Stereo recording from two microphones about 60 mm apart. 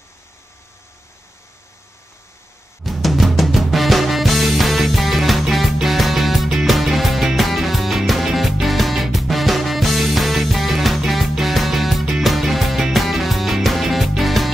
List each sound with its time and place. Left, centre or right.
2.8 s music: centre